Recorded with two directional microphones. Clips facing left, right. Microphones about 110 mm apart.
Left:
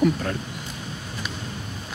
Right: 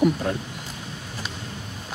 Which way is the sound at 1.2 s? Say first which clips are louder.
Left 2 dB; 30° right (ahead or behind).